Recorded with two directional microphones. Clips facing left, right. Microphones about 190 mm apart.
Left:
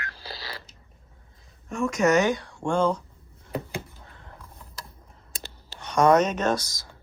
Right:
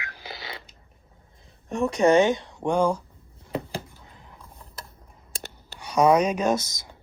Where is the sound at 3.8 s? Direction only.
15° right (ahead or behind).